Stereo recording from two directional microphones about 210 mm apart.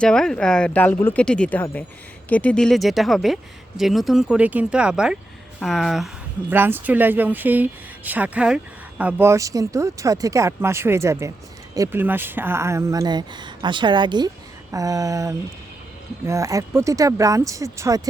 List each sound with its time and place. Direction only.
0.0 s speech: 5° left (ahead or behind); by 18.0 s 15° right (ahead or behind)